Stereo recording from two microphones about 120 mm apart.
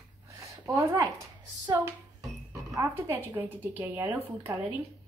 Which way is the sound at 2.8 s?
20° right (ahead or behind).